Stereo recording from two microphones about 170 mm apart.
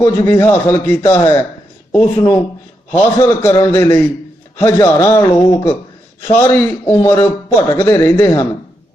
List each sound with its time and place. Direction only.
0.0 s a man's voice: 15° left (ahead or behind)